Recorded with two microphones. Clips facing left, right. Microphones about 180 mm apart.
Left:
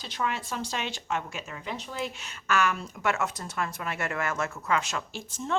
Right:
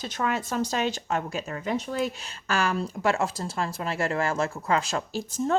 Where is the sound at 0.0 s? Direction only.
45° right (ahead or behind).